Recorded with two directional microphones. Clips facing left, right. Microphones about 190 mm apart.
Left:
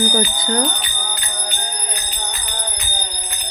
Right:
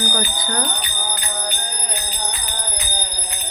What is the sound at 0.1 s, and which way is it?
Speech, 25° left (ahead or behind).